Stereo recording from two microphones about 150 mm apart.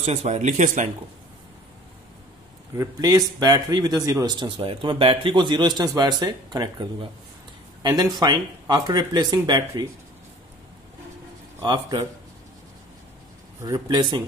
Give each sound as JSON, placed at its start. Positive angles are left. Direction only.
{"t": 0.0, "sound": "speech", "side_deg": -45}
{"t": 2.8, "sound": "speech", "side_deg": -25}
{"t": 11.6, "sound": "a man's voice", "side_deg": -30}
{"t": 13.6, "sound": "speech", "side_deg": -30}